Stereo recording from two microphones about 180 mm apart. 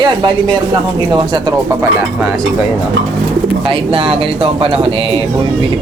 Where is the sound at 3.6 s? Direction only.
30° right (ahead or behind).